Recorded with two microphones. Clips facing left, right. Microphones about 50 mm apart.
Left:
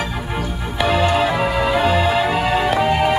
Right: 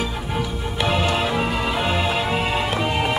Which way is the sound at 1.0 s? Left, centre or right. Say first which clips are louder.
Left 4 dB; centre.